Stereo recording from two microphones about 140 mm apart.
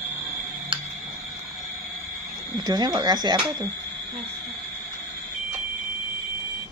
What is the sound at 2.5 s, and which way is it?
Speech, 25° right (ahead or behind).